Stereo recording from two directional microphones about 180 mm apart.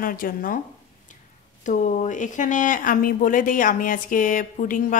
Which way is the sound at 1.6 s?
45° left (ahead or behind).